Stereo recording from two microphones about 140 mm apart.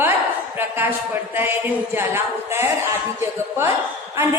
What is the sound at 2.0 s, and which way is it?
Speech, 15° right (ahead or behind).